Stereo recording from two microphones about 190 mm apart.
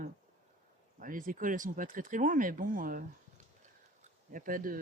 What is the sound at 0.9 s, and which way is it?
Speech, 45° right (ahead or behind).